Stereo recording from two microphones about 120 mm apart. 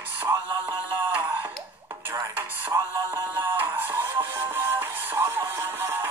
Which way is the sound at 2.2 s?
15° right (ahead or behind).